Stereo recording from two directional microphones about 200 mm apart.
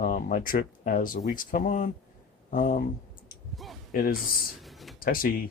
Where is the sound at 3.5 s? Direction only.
Centre (ahead or behind).